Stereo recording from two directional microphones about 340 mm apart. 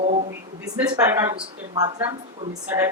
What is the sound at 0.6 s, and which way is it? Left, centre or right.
A woman's voice, centre.